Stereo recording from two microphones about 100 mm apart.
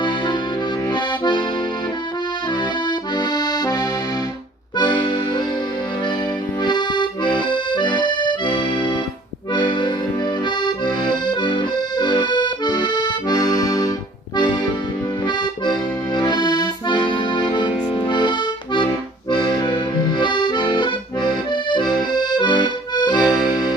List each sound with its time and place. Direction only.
0.9 s accordion: 50° left (ahead or behind)
3.2 s accordion: 40° left (ahead or behind)
4.9 s accordion: 50° left (ahead or behind)
6.6 s accordion: 50° left (ahead or behind)
16.1 s accordion: 50° left (ahead or behind)
23.3 s music: 45° left (ahead or behind)